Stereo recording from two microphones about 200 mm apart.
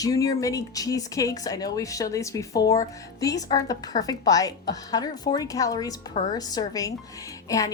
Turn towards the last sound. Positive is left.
turn(degrees=15)  # may be behind; listen again after turning